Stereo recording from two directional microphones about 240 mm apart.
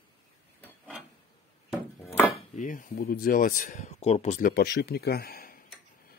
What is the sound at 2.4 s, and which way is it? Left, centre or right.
Speech, left.